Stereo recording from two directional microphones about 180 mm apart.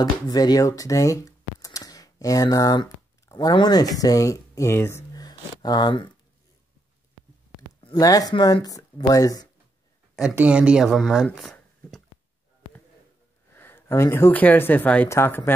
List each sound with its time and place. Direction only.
0.0 s speech: 20° left (ahead or behind)
7.8 s speech: 20° left (ahead or behind)
10.1 s speech: 5° right (ahead or behind)
13.6 s speech: 10° left (ahead or behind)